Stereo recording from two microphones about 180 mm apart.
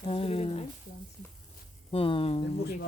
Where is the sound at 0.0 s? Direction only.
35° left (ahead or behind).